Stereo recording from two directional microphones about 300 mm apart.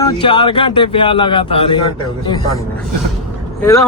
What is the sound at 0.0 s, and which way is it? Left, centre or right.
Speech, centre.